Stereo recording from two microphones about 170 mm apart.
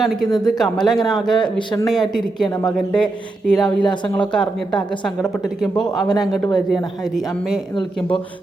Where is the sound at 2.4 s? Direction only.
25° left (ahead or behind).